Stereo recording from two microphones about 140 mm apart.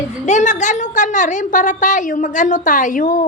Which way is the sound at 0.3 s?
60° left (ahead or behind).